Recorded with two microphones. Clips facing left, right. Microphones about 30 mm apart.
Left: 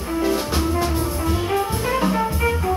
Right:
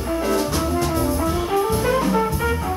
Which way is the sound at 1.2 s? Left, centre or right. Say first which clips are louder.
Right 1 dB; centre.